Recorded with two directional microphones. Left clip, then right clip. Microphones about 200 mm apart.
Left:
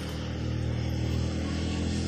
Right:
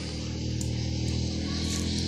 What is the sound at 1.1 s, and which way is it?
Vehicle, 40° right (ahead or behind).